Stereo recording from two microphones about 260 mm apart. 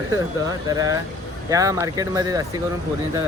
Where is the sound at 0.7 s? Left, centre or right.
Centre.